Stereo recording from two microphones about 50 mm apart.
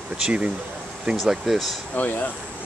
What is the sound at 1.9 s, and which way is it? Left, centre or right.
Speech, left.